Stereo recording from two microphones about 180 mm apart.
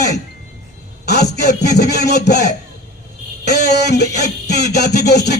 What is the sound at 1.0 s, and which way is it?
Speech, 65° left (ahead or behind).